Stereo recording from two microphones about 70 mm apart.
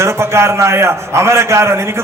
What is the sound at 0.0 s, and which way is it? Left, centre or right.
A man's voice, right.